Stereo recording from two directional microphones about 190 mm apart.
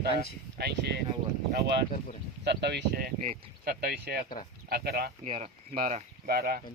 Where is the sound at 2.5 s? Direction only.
60° right (ahead or behind).